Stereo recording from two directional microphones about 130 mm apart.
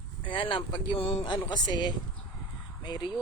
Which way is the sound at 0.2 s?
40° left (ahead or behind).